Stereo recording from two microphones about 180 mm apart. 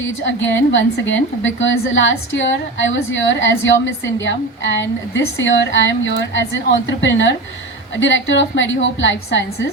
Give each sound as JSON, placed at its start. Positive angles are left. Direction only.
{"t": 0.0, "sound": "a woman's voice", "side_deg": 90}